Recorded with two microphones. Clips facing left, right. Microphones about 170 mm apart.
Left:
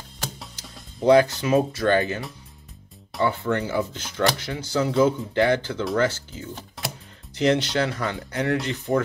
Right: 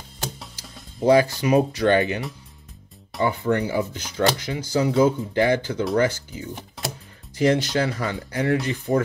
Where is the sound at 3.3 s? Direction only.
15° right (ahead or behind).